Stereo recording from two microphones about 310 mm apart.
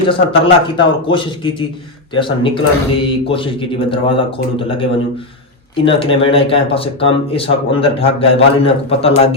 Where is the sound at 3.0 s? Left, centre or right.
Centre.